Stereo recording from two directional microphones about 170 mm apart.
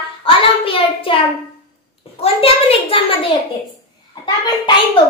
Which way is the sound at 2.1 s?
35° left (ahead or behind).